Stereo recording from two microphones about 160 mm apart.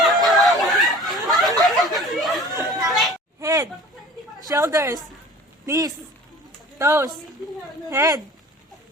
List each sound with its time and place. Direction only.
0.0 s snicker: centre (ahead or behind)
1.6 s a sound: centre (ahead or behind)
2.5 s chatter: 20° right (ahead or behind)
2.9 s children playing: centre (ahead or behind)
3.4 s a sound: 20° right (ahead or behind)
4.4 s a woman's voice: 20° right (ahead or behind)